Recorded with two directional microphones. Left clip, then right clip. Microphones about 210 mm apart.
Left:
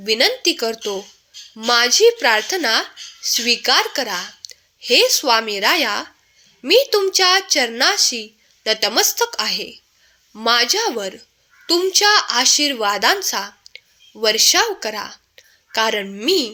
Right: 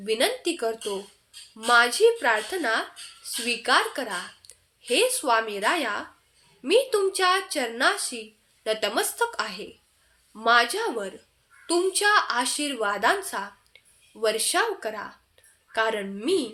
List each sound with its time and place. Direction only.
0.0 s a woman's voice: 30° left (ahead or behind)